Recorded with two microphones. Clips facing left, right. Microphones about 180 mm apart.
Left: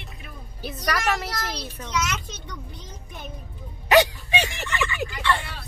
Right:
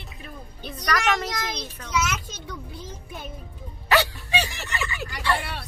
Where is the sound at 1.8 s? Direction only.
5° right (ahead or behind).